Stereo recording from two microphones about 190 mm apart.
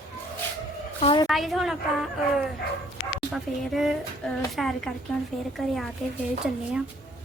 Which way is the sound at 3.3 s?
Centre (ahead or behind).